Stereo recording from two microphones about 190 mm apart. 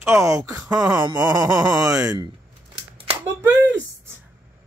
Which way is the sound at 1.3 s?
20° right (ahead or behind).